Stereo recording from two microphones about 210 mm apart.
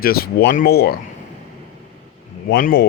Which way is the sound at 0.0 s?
45° left (ahead or behind).